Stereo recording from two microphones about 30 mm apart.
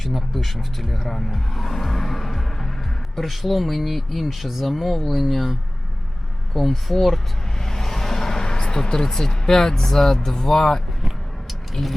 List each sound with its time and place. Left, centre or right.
0.0 s speech: centre
1.3 s music: centre
3.2 s speech: centre
7.6 s a sound: centre
9.3 s speech: centre
11.7 s speech: centre